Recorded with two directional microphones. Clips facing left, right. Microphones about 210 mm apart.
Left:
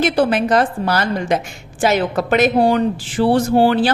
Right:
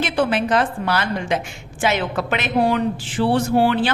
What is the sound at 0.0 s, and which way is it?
Speech, 40° left (ahead or behind).